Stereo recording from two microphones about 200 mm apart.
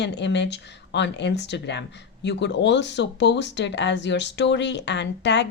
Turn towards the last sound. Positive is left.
turn(degrees=60)  # may be behind; listen again after turning